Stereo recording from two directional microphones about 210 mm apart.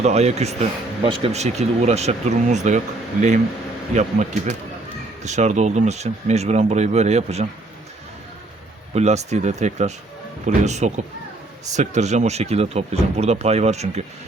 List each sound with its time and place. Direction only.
0.0 s speech: 30° right (ahead or behind)
9.0 s speech: 30° right (ahead or behind)